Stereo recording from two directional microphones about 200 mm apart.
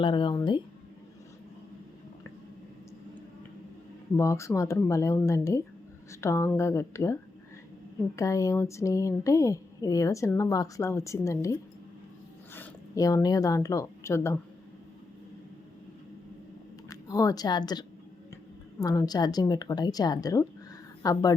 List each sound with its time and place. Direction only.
0.0 s a woman's voice: 25° left (ahead or behind)
4.2 s speech: 15° left (ahead or behind)
16.9 s a woman's voice: 20° left (ahead or behind)